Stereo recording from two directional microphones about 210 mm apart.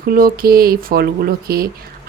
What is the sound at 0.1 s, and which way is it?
Speech, 45° right (ahead or behind).